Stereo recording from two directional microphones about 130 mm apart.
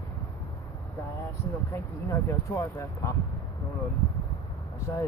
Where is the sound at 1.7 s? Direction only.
20° left (ahead or behind).